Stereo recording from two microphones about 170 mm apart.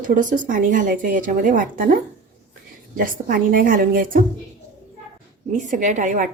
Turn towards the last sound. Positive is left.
turn(degrees=-50)  # may be behind; listen again after turning